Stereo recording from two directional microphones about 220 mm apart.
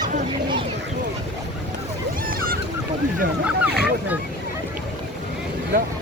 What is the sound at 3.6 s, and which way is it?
Boat, 5° right (ahead or behind).